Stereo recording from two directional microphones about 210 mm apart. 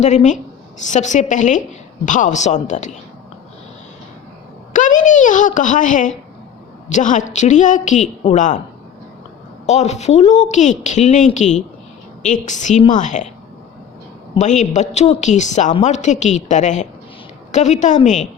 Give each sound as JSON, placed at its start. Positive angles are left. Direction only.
{"t": 0.0, "sound": "a woman's voice", "side_deg": 35}
{"t": 4.9, "sound": "a woman's voice", "side_deg": 35}
{"t": 9.6, "sound": "a woman's voice", "side_deg": 30}
{"t": 14.3, "sound": "a woman's voice", "side_deg": 35}